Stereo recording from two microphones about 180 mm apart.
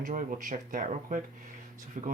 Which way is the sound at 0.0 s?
50° right (ahead or behind).